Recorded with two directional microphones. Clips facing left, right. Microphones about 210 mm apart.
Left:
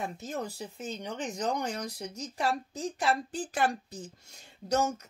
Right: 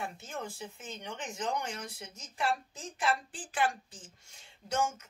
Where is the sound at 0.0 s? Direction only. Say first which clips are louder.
Left 4 dB; 40° left (ahead or behind).